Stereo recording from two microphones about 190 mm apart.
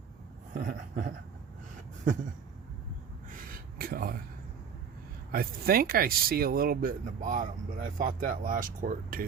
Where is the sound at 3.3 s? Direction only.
50° right (ahead or behind).